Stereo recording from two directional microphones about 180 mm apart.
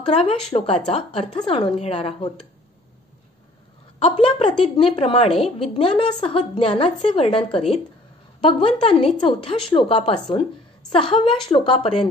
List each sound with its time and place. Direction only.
0.0 s a woman's voice: 30° left (ahead or behind)
4.0 s a woman's voice: 30° left (ahead or behind)